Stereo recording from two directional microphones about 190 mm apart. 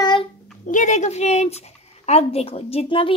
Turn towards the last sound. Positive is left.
turn(degrees=30)  # may be behind; listen again after turning